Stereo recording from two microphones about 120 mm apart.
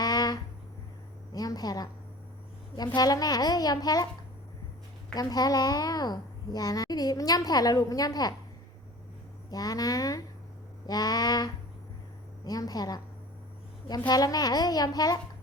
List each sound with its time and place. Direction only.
0.0 s a sound: 35° left (ahead or behind)
2.7 s a child's voice: 35° left (ahead or behind)
5.1 s a child's voice: 35° left (ahead or behind)
9.5 s a child's voice: 30° left (ahead or behind)
14.1 s a child's voice: 30° left (ahead or behind)